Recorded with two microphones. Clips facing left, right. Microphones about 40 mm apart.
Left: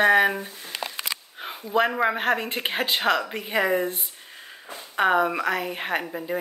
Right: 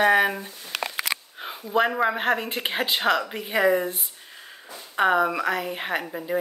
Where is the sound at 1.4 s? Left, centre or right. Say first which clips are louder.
Even; centre.